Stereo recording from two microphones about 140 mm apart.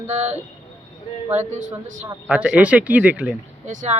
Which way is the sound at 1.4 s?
60° right (ahead or behind).